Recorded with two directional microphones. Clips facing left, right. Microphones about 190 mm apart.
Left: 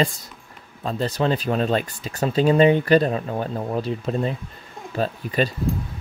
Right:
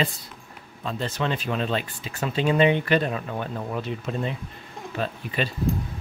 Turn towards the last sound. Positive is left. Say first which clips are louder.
# left 5 dB
turn(degrees=40)  # may be behind; listen again after turning